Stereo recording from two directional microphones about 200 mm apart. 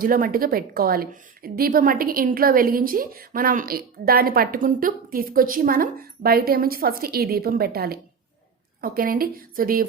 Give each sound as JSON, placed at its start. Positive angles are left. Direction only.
{"t": 0.0, "sound": "a woman's voice", "side_deg": -45}